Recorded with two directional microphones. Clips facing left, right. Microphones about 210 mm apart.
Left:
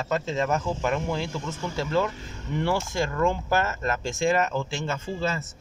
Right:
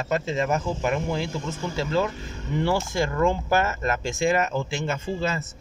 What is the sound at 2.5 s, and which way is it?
Speech, 5° right (ahead or behind).